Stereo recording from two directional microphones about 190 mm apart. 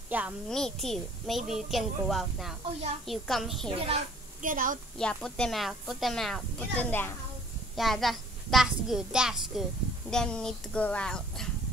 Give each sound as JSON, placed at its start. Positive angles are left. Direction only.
{"t": 0.1, "sound": "a child's voice", "side_deg": -10}
{"t": 0.5, "sound": "a child's voice", "side_deg": 5}
{"t": 4.4, "sound": "a woman's voice", "side_deg": -45}
{"t": 4.9, "sound": "a child's voice", "side_deg": 5}